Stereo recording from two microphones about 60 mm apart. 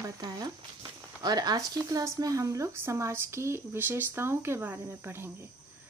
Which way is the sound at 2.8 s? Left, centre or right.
Right.